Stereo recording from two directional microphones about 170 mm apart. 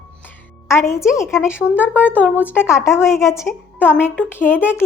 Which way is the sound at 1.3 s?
5° right (ahead or behind).